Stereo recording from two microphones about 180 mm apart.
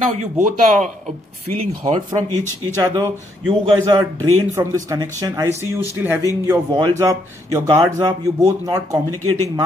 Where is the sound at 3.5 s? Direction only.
25° right (ahead or behind).